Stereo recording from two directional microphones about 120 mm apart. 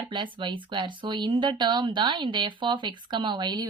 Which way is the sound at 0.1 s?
40° right (ahead or behind).